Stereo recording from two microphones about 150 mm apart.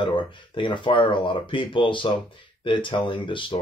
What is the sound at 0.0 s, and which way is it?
A man's voice, 30° left (ahead or behind).